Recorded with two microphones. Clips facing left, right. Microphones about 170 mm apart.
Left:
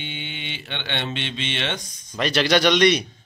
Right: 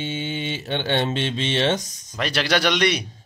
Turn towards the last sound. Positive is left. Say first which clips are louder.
# left 4 dB
turn(degrees=-5)  # may be behind; listen again after turning